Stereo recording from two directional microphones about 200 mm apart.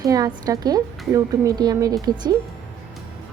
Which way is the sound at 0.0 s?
20° right (ahead or behind).